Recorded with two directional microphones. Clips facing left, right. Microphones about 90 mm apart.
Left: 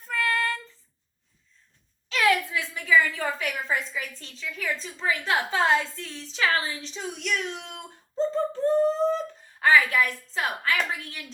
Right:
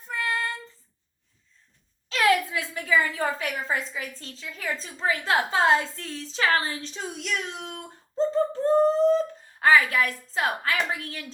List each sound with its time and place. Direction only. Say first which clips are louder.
0.1 s child singing: left 2 dB; 20° right (ahead or behind)
2.0 s a sound: right 1 dB; 40° right (ahead or behind)
3.7 s a woman's voice: even; 35° right (ahead or behind)